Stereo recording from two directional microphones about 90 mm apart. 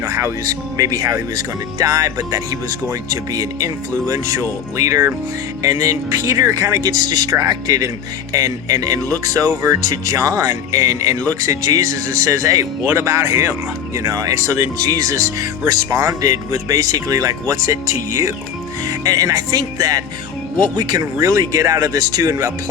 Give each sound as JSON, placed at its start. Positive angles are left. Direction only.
{"t": 0.0, "sound": "speech", "side_deg": -35}